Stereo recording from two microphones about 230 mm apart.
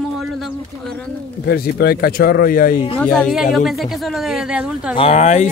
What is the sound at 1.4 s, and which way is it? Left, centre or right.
Speech, left.